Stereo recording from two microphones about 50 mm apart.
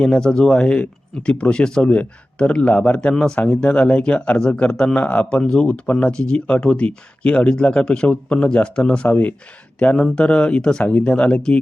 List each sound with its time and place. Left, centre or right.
0.0 s speech: centre
4.9 s speech: left
9.0 s speech: left
9.7 s speech: left